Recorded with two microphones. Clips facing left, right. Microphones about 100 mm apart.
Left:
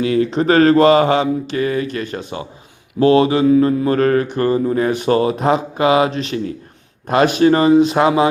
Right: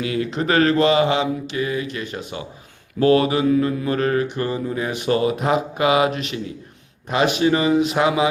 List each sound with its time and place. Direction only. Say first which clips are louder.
0.0 s mantra: left 7 dB; 35° left (ahead or behind)
7.1 s mantra: left 5 dB; 45° left (ahead or behind)